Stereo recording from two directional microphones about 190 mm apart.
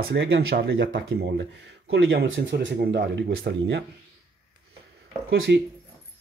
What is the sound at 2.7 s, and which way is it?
Speech, 55° right (ahead or behind).